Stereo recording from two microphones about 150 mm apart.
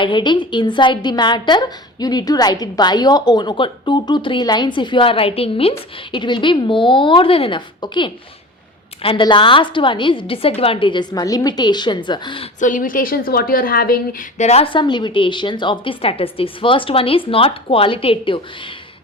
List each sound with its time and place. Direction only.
0.0 s a woman's voice: 30° left (ahead or behind)
12.5 s a woman's voice: 60° left (ahead or behind); by 18.7 s 35° left (ahead or behind)